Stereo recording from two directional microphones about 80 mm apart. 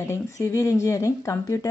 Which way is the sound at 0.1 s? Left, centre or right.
Left.